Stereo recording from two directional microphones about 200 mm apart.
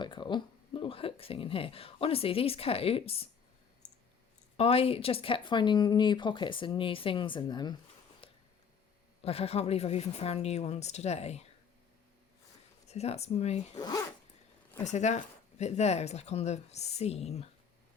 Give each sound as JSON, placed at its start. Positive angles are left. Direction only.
{"t": 0.0, "sound": "speech", "side_deg": 25}
{"t": 4.5, "sound": "speech", "side_deg": 30}
{"t": 8.2, "sound": "a sound", "side_deg": 25}
{"t": 9.2, "sound": "speech", "side_deg": 30}
{"t": 12.9, "sound": "speech", "side_deg": 30}
{"t": 13.7, "sound": "speech", "side_deg": 20}
{"t": 14.8, "sound": "speech", "side_deg": 35}